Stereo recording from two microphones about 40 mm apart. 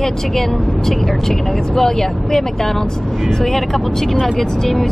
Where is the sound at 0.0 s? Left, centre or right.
Centre.